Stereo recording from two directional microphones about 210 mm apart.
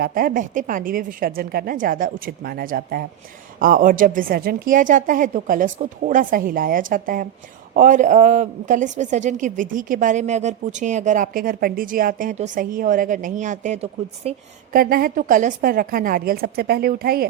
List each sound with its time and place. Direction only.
0.0 s a woman's voice: 40° right (ahead or behind)
14.8 s a woman's voice: 45° right (ahead or behind)